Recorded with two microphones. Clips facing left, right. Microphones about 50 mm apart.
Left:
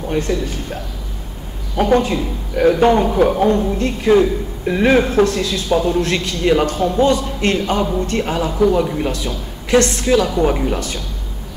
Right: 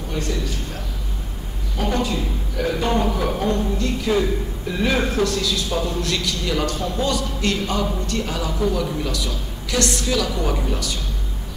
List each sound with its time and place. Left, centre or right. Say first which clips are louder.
0.3 s speech: left 7 dB; left
1.8 s speech: left 8 dB; left